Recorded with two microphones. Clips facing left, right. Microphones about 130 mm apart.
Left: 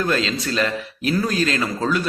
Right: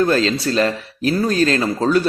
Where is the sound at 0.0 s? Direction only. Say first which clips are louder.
Right 5 dB; 35° right (ahead or behind).